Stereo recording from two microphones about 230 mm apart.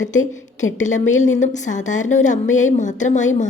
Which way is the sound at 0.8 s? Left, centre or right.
Left.